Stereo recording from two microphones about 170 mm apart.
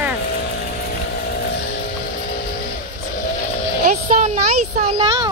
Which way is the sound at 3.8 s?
45° right (ahead or behind).